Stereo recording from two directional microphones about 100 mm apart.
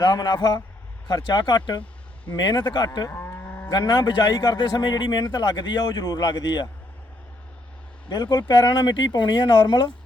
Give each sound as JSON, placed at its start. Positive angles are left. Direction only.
{"t": 0.0, "sound": "a man's voice", "side_deg": 45}
{"t": 3.1, "sound": "moo", "side_deg": 20}
{"t": 3.7, "sound": "a man's voice", "side_deg": 45}
{"t": 8.1, "sound": "a man's voice", "side_deg": 45}